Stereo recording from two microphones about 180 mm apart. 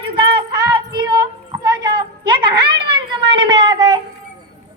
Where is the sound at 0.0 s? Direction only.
30° right (ahead or behind).